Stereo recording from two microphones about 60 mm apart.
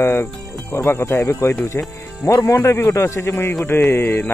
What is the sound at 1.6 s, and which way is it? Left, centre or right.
Speech, left.